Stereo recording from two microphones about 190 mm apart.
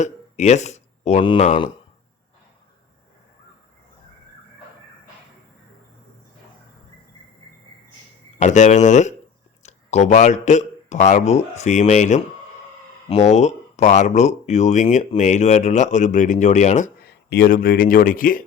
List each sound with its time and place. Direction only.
0.0 s speech: 35° left (ahead or behind)
8.4 s speech: 40° left (ahead or behind)
17.0 s a man's voice: 60° left (ahead or behind)